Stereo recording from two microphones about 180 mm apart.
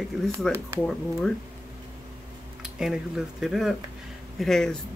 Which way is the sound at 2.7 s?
5° right (ahead or behind).